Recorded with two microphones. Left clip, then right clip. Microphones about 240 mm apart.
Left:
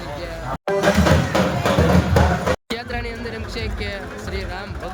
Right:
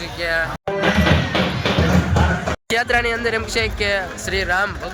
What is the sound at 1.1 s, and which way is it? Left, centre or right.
Music, centre.